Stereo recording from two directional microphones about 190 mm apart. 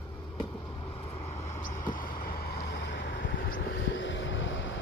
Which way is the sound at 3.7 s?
75° left (ahead or behind).